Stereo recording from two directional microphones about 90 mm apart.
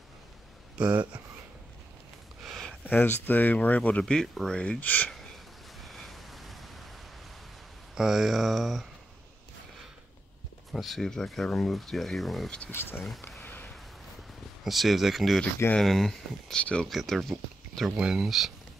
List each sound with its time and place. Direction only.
0.7 s speech: 15° right (ahead or behind)
2.4 s a sound: 5° left (ahead or behind)
2.8 s speech: 20° left (ahead or behind)
4.0 s speech: 5° left (ahead or behind)
5.8 s crow: centre (ahead or behind)
7.9 s speech: 5° right (ahead or behind)
10.7 s speech: centre (ahead or behind)
13.4 s a sound: 20° left (ahead or behind)
14.6 s speech: centre (ahead or behind)